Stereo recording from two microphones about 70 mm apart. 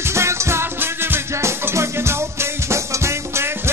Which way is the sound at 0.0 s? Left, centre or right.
Right.